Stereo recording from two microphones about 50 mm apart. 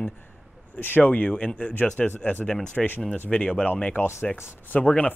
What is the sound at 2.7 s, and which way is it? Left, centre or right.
Speech, left.